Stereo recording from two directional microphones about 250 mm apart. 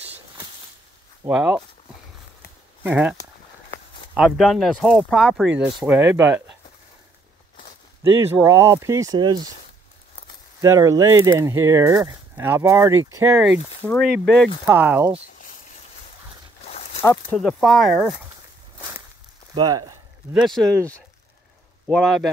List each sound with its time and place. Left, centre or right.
1.2 s speech: centre
2.8 s speech: centre
8.0 s speech: centre
10.6 s speech: centre
16.6 s a sound: left
17.0 s speech: centre
17.4 s speech: centre
19.5 s speech: centre
20.3 s speech: centre